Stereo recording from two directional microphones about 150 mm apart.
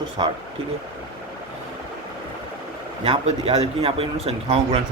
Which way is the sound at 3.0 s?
40° right (ahead or behind).